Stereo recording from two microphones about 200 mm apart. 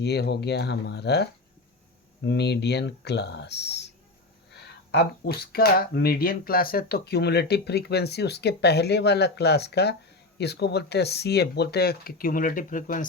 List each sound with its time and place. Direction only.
0.0 s speech: 55° left (ahead or behind)